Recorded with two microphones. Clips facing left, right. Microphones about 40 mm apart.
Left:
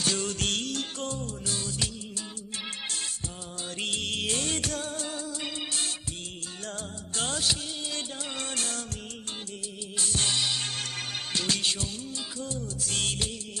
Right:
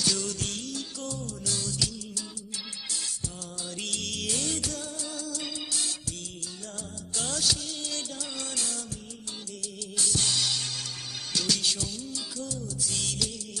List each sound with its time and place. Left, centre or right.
0.0 s music: left
3.8 s music: left
5.2 s music: left
7.2 s music: left
10.0 s music: left
12.8 s music: left